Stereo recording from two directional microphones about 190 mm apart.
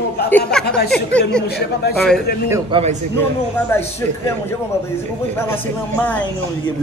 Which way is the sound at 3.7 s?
10° left (ahead or behind).